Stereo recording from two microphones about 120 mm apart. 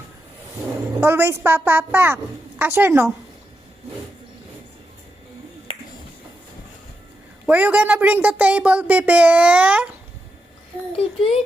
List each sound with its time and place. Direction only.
1.0 s speech: 20° right (ahead or behind)
7.4 s speech: 10° right (ahead or behind)
10.9 s a child's voice: 50° left (ahead or behind)